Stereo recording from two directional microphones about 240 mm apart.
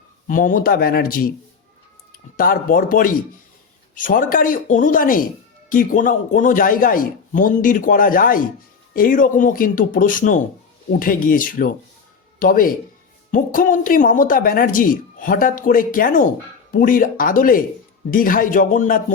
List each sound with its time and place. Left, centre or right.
0.3 s speech: left
2.3 s speech: left